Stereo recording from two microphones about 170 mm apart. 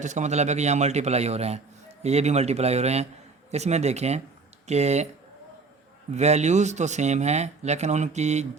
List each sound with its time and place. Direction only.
0.0 s a man's voice: 45° right (ahead or behind)
6.1 s a man's voice: 40° right (ahead or behind)